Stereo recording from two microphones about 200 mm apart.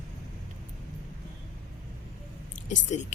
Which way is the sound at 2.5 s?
40° left (ahead or behind).